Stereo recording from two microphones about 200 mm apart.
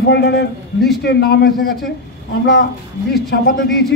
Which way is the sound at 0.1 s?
55° left (ahead or behind).